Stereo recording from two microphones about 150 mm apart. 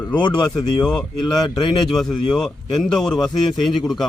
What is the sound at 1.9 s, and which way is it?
A man's voice, centre (ahead or behind).